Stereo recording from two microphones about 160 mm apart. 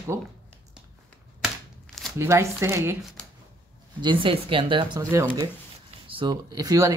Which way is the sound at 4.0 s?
30° right (ahead or behind).